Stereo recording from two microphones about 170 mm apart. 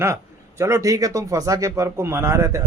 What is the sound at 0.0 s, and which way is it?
Speech, 15° right (ahead or behind).